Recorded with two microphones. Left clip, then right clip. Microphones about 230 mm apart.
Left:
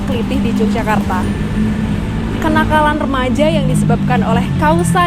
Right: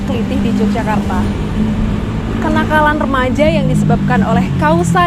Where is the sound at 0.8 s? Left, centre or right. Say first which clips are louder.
Left 1 dB; left.